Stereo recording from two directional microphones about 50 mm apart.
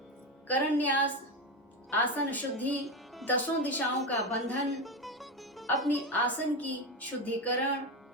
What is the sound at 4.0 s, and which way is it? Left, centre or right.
Music, centre.